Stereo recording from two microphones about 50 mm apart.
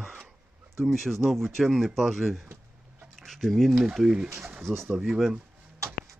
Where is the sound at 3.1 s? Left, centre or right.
Centre.